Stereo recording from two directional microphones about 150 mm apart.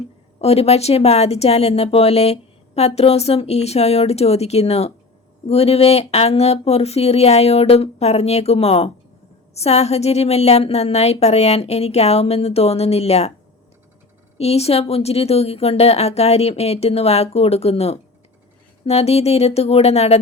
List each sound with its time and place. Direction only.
0.4 s speech: 45° left (ahead or behind)
14.3 s speech: 45° left (ahead or behind)